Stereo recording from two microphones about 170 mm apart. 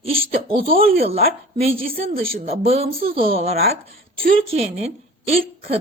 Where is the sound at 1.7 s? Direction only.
60° right (ahead or behind).